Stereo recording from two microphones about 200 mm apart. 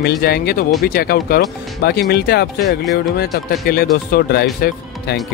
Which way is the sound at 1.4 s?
Centre (ahead or behind).